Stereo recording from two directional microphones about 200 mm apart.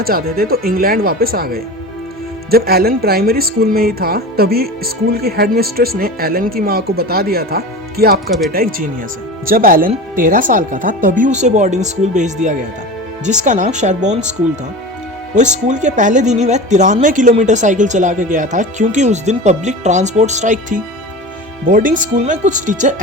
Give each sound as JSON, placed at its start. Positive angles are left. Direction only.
{"t": 0.0, "sound": "speech", "side_deg": -50}
{"t": 15.4, "sound": "speech", "side_deg": -35}